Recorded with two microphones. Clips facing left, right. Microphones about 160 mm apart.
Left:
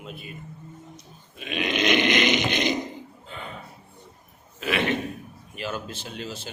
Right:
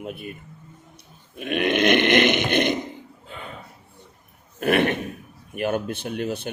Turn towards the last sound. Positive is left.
turn(degrees=-60)  # may be behind; listen again after turning